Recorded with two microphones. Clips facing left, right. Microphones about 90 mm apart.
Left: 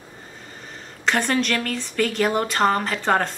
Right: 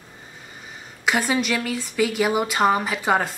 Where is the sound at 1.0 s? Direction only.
5° right (ahead or behind).